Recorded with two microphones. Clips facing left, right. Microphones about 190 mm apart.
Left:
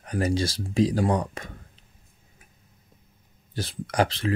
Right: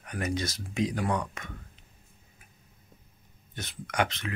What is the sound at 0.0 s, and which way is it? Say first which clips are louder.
Speech: left 6 dB; 30° left (ahead or behind).